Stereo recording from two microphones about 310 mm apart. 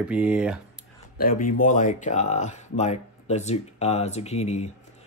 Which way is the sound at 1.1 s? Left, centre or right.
Left.